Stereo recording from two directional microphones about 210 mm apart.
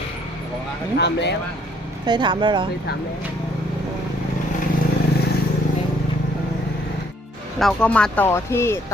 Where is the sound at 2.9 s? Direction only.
50° left (ahead or behind).